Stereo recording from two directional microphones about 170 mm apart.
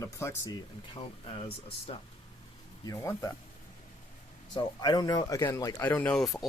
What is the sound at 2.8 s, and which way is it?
Speech, 20° left (ahead or behind).